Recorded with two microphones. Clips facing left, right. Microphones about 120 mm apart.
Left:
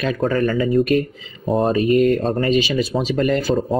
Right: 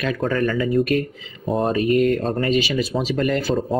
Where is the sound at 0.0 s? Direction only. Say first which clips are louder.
Left 2 dB; 30° left (ahead or behind).